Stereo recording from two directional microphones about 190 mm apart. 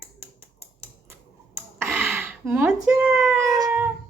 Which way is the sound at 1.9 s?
5° right (ahead or behind).